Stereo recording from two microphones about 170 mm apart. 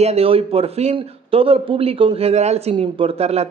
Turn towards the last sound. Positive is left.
turn(degrees=-35)  # may be behind; listen again after turning